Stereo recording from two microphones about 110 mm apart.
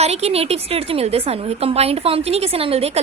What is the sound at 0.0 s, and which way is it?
A woman's voice, 70° right (ahead or behind).